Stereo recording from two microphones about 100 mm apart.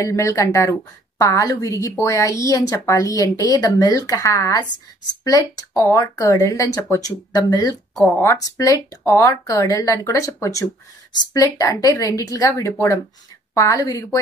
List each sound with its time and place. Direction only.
0.0 s a woman's voice: 30° left (ahead or behind)